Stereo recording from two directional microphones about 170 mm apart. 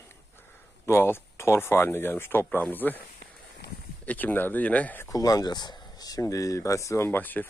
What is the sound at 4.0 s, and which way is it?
Speech, 10° left (ahead or behind).